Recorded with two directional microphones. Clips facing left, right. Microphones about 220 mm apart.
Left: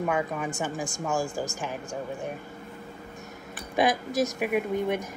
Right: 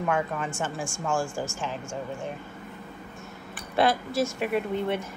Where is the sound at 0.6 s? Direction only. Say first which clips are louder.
Left 1 dB; 15° left (ahead or behind).